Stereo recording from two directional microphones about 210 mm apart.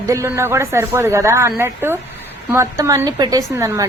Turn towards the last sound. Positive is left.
turn(degrees=-15)  # may be behind; listen again after turning